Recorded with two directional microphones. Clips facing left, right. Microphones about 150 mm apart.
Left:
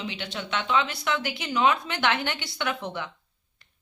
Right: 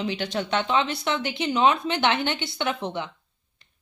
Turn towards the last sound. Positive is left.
turn(degrees=-20)  # may be behind; listen again after turning